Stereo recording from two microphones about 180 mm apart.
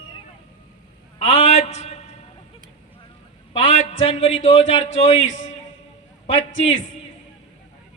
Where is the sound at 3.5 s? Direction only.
40° left (ahead or behind).